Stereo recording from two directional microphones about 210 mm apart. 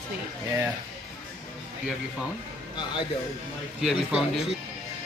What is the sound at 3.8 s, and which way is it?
Speech, 5° right (ahead or behind).